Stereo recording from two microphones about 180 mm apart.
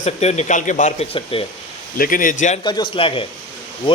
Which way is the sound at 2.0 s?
50° left (ahead or behind).